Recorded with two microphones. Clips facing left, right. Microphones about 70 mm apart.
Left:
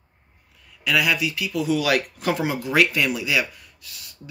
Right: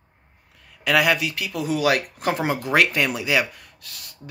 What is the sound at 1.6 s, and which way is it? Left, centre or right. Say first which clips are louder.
Speech: even; right.